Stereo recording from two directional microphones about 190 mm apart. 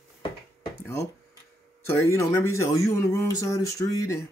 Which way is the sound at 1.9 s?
15° left (ahead or behind).